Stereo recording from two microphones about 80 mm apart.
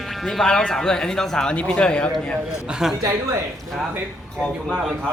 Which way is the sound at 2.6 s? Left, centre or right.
Centre.